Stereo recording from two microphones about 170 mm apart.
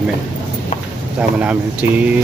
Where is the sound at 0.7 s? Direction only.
45° left (ahead or behind).